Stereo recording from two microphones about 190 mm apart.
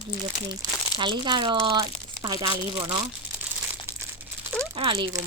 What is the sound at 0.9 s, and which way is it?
Speech, 25° right (ahead or behind).